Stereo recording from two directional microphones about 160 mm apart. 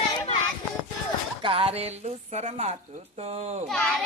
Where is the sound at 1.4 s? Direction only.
35° right (ahead or behind).